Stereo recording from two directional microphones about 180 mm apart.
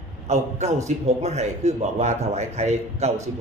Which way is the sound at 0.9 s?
40° right (ahead or behind).